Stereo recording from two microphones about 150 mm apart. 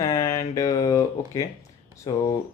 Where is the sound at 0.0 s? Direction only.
25° left (ahead or behind).